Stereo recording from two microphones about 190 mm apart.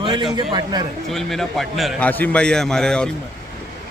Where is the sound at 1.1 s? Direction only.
Centre (ahead or behind).